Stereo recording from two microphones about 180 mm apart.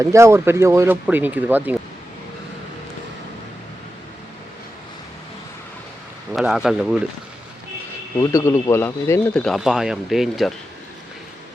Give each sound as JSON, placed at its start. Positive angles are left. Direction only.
{"t": 0.0, "sound": "speech", "side_deg": -15}
{"t": 6.3, "sound": "a man's voice", "side_deg": 0}
{"t": 8.2, "sound": "speech", "side_deg": 15}